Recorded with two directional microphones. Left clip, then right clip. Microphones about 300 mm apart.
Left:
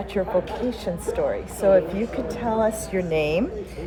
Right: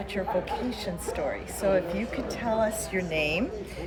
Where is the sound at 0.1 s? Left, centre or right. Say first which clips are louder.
Left 5 dB; centre.